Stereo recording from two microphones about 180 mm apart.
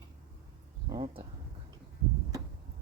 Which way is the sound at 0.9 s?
25° right (ahead or behind).